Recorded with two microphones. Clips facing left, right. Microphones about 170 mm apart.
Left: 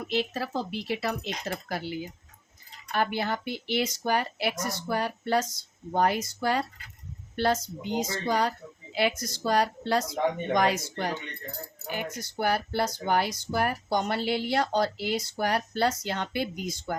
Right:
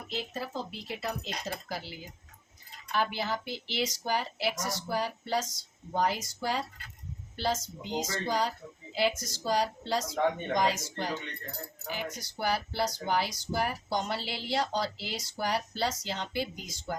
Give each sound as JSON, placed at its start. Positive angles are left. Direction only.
{"t": 0.1, "sound": "speech", "side_deg": 80}